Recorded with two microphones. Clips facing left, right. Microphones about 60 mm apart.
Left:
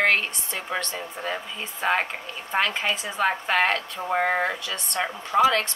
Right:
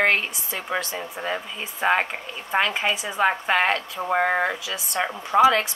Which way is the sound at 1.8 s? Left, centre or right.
Centre.